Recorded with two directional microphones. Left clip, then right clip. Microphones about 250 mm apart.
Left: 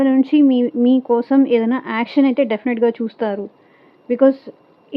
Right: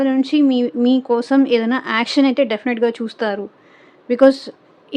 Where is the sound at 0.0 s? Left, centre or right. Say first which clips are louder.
Left 2 dB; centre.